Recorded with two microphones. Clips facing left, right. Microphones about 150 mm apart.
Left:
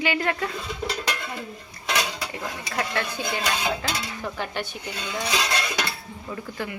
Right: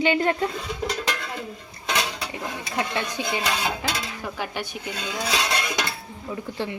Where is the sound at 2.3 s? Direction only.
20° right (ahead or behind).